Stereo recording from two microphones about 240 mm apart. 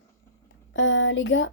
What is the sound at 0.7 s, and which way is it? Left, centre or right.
Speech, left.